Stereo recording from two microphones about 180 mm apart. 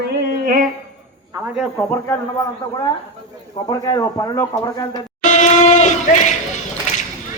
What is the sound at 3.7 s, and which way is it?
Speech, 20° left (ahead or behind).